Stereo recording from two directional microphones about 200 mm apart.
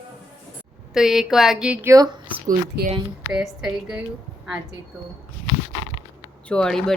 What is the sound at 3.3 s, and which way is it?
Speech, 5° right (ahead or behind).